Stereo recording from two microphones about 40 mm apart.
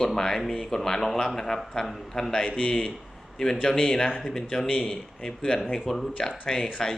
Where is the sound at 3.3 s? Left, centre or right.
Centre.